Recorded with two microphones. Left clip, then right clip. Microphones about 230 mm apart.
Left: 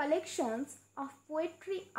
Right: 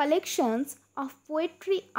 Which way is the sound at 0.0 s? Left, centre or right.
Right.